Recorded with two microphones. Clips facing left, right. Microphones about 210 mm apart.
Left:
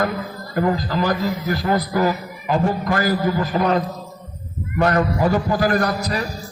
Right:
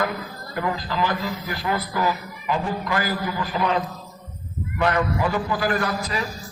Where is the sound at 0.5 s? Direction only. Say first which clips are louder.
Left 6 dB; 40° left (ahead or behind).